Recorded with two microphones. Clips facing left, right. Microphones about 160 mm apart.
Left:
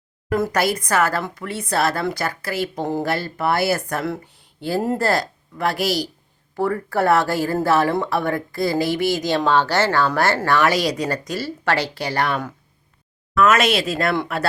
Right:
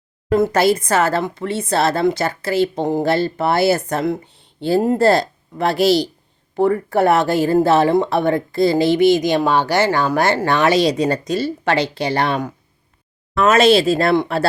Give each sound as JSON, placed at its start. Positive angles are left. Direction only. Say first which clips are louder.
{"t": 0.3, "sound": "speech", "louder": "right 5 dB", "side_deg": -25}